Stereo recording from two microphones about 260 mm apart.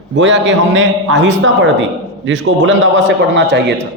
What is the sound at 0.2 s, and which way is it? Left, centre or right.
A man's voice, right.